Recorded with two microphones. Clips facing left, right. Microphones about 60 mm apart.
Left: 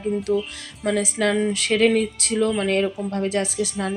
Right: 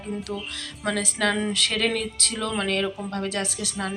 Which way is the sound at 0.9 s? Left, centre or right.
Right.